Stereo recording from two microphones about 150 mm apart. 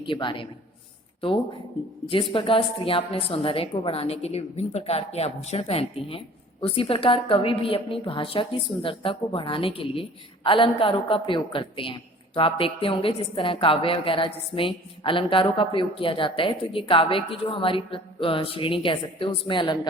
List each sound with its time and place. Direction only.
0.0 s a woman's voice: 35° left (ahead or behind)
2.0 s a woman's voice: 35° left (ahead or behind)